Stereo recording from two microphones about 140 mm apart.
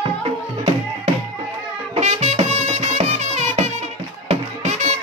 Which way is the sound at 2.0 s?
55° right (ahead or behind).